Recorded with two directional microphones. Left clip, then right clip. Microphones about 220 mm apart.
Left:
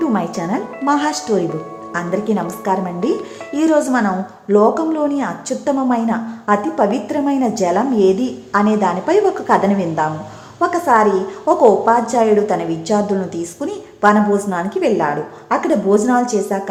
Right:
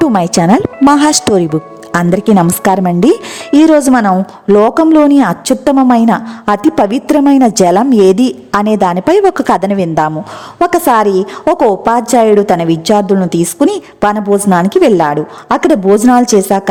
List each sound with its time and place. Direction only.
0.0 s a woman's voice: 45° right (ahead or behind)